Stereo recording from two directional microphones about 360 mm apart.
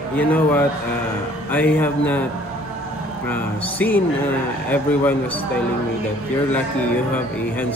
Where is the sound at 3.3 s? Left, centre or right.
Centre.